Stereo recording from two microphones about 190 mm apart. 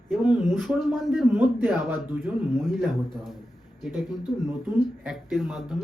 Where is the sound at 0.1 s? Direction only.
10° right (ahead or behind).